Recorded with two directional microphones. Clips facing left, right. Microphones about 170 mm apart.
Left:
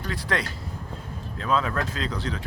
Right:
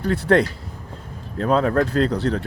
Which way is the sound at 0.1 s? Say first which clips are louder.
Right 12 dB; 55° right (ahead or behind).